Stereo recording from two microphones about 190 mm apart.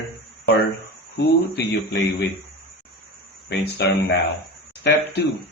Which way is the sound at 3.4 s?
60° left (ahead or behind).